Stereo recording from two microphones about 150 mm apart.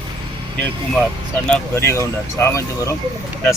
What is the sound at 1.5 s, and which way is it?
Speech, 15° left (ahead or behind).